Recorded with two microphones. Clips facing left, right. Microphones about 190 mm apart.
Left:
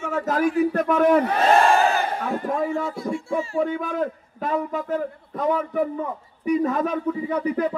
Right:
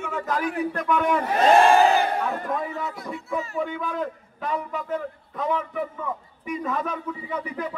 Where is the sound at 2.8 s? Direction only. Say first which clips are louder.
Left 5 dB; 30° left (ahead or behind).